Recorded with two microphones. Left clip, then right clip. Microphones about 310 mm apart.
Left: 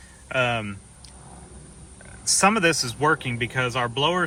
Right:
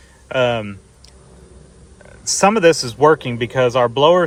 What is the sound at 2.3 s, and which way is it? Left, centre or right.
Speech, centre.